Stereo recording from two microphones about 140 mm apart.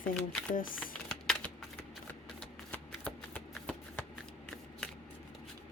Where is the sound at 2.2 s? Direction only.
5° left (ahead or behind).